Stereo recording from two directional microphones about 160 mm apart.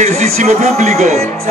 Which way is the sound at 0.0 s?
45° right (ahead or behind).